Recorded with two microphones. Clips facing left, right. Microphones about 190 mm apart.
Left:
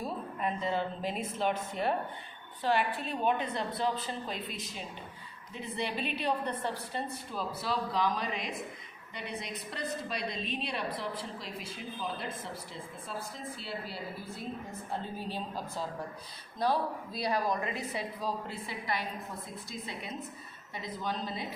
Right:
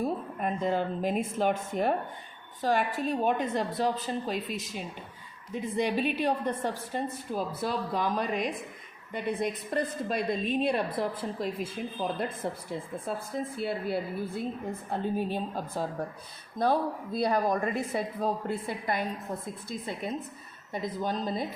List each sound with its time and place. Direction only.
0.0 s a woman's voice: 50° right (ahead or behind)
20.7 s a woman's voice: 45° right (ahead or behind)